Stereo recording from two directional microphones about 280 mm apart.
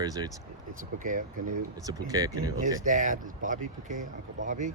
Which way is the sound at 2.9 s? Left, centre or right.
Right.